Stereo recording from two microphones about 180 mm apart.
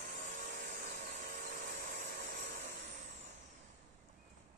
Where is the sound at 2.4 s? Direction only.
65° right (ahead or behind).